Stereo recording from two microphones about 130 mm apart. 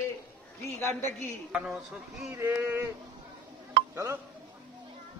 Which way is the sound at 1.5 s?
5° right (ahead or behind).